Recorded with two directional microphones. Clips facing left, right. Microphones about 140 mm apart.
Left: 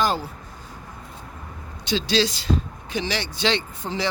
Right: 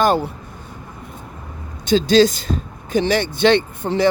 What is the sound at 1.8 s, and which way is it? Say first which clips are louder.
Speech: right 9 dB; 45° right (ahead or behind).